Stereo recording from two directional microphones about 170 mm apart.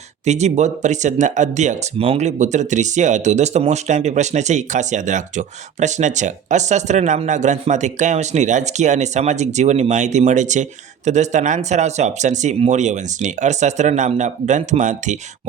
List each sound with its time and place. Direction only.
0.3 s speech: 40° right (ahead or behind)